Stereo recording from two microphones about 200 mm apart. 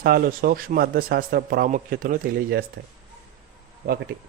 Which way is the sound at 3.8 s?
50° right (ahead or behind).